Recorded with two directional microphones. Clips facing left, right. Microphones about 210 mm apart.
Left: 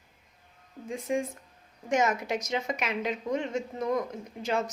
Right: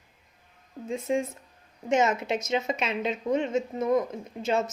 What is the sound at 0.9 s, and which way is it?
A woman's voice, 25° right (ahead or behind).